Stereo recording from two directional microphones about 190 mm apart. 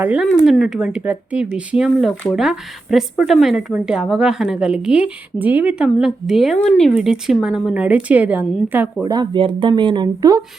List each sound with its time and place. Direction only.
0.0 s speech: 10° right (ahead or behind)
0.3 s speech: 5° left (ahead or behind)
9.0 s speech: 25° right (ahead or behind)